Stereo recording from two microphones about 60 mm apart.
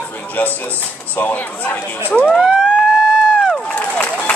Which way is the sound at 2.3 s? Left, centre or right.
Centre.